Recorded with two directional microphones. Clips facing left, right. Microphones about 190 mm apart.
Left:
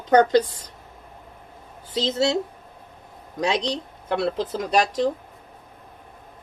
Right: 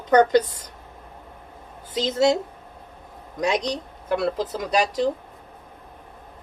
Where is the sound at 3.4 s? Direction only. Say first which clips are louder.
Even; 30° left (ahead or behind).